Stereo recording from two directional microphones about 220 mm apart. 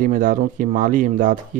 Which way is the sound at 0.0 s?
35° right (ahead or behind).